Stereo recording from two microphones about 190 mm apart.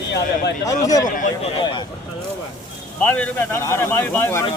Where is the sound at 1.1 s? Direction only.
45° left (ahead or behind).